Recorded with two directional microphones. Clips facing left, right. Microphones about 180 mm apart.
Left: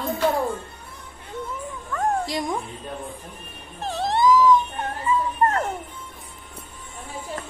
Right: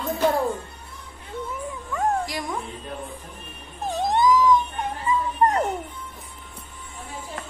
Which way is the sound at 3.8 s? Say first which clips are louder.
Even; 15° right (ahead or behind).